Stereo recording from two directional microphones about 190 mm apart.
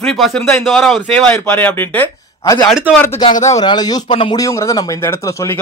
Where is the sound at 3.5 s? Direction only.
20° left (ahead or behind).